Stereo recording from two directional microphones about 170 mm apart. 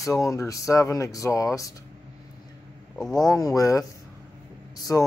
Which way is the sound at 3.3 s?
20° left (ahead or behind).